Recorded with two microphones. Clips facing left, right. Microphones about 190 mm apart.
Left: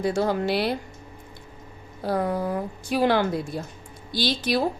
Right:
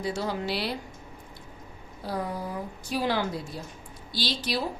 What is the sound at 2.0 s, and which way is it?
A woman's voice, 60° left (ahead or behind).